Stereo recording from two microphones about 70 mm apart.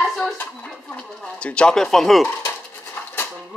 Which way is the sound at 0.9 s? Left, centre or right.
Centre.